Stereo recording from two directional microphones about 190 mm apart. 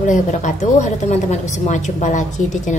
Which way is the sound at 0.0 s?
40° left (ahead or behind).